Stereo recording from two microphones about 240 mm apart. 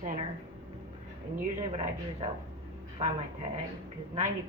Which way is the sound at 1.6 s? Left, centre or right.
Right.